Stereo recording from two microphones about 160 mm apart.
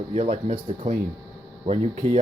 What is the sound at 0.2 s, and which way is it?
Speech, 45° right (ahead or behind).